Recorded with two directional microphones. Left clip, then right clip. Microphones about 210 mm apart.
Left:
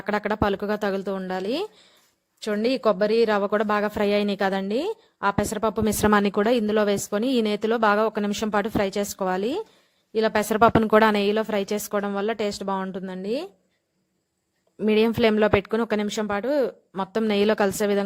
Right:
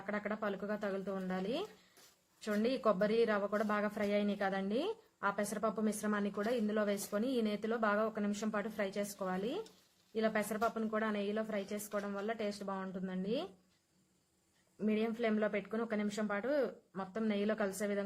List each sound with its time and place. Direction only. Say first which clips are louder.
0.0 s speech: left 15 dB; 45° left (ahead or behind)
14.8 s speech: left 16 dB; 45° left (ahead or behind)